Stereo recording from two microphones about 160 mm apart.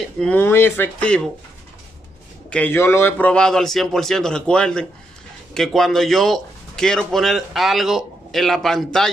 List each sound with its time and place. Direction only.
0.2 s speech: 10° left (ahead or behind)
2.5 s speech: 10° left (ahead or behind)